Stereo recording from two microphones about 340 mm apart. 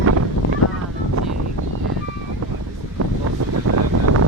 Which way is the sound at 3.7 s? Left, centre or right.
Right.